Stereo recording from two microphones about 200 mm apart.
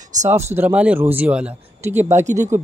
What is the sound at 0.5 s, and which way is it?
Speech, 5° right (ahead or behind).